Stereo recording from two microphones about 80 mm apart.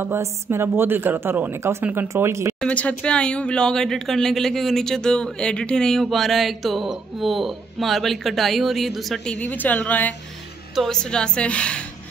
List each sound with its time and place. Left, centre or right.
0.0 s speech: right
2.6 s speech: centre
9.2 s a woman's voice: centre
10.7 s a woman's voice: centre
11.0 s a woman's voice: centre